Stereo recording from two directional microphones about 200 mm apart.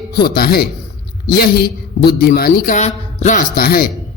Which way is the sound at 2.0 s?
50° left (ahead or behind).